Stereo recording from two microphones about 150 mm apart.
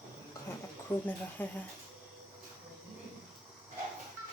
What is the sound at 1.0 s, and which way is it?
Speech, 10° left (ahead or behind).